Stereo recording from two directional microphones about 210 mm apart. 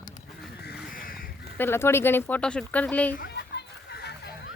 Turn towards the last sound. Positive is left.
turn(degrees=50)  # may be behind; listen again after turning